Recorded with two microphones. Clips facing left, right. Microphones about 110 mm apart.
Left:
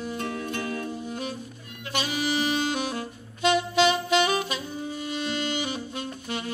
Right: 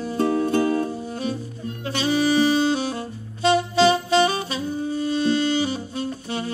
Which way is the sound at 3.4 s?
30° right (ahead or behind).